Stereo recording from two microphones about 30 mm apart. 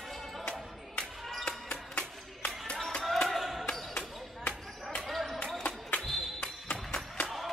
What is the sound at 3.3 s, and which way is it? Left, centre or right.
Basketball bounce, centre.